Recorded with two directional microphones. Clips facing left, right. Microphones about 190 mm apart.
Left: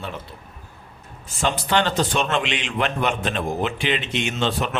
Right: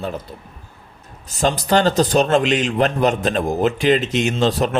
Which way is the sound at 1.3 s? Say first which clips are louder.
Right 5 dB; 40° right (ahead or behind).